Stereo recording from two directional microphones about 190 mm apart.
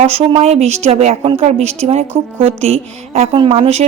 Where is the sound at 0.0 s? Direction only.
30° right (ahead or behind).